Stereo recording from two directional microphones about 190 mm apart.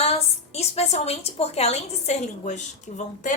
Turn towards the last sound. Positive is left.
turn(degrees=40)  # may be behind; listen again after turning